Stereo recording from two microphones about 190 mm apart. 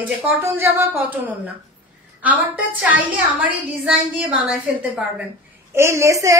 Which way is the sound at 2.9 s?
10° right (ahead or behind).